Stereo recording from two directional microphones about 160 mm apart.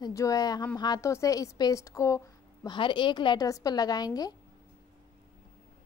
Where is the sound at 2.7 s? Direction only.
30° left (ahead or behind).